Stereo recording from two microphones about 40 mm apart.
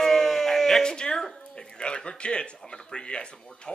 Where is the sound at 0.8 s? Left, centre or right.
Centre.